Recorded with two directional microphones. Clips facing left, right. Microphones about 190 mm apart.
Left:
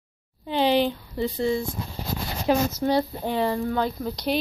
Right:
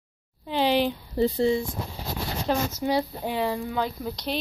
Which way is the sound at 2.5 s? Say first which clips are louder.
Left 4 dB; 10° left (ahead or behind).